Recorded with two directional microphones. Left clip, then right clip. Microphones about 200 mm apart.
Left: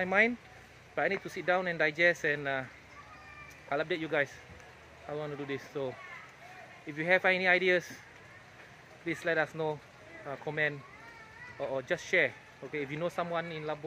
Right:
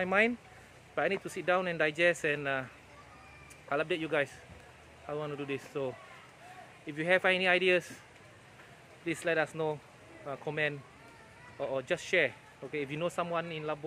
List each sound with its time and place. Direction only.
0.0 s speech: 5° right (ahead or behind)
6.9 s speech: 5° right (ahead or behind)
9.0 s speech: 5° right (ahead or behind)